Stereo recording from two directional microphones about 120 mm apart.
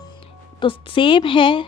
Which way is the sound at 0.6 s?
45° left (ahead or behind).